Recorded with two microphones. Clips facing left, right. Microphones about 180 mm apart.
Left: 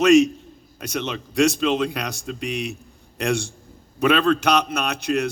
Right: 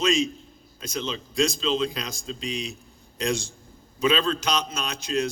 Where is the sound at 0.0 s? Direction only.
70° left (ahead or behind).